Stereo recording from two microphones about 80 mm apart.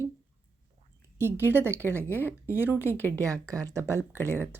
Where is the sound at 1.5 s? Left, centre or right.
Right.